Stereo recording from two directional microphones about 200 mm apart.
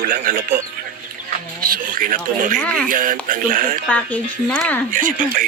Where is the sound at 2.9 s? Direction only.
45° right (ahead or behind).